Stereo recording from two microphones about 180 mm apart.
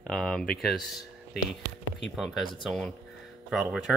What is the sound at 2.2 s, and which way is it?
Speech, centre (ahead or behind).